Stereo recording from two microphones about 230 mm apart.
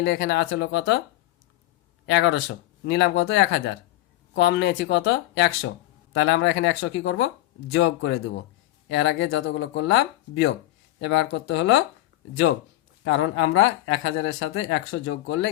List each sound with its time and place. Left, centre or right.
0.0 s speech: left
2.0 s speech: left
13.1 s speech: left